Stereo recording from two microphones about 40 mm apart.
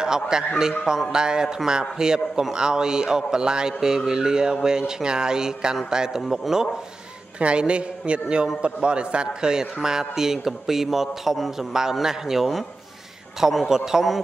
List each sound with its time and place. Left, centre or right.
0.0 s a man's voice: centre
6.2 s a man's voice: centre
7.3 s a man's voice: right; by 14.0 s centre